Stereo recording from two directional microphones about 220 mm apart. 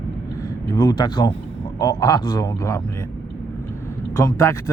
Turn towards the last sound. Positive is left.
turn(degrees=15)  # may be behind; listen again after turning